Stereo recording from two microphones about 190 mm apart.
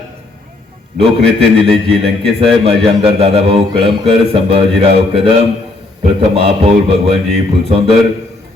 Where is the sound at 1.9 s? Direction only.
30° right (ahead or behind).